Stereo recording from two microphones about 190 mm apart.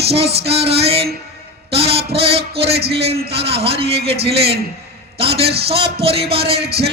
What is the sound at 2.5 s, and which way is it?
Speech, 55° right (ahead or behind).